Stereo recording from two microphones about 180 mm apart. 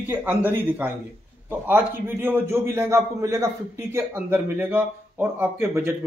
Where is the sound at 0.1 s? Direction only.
10° right (ahead or behind).